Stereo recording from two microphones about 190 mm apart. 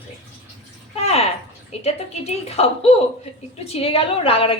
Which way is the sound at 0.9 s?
35° left (ahead or behind).